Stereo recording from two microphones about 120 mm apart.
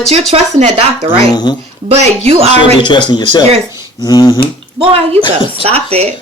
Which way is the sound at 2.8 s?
40° left (ahead or behind).